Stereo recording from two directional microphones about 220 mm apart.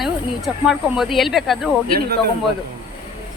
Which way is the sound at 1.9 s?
45° right (ahead or behind).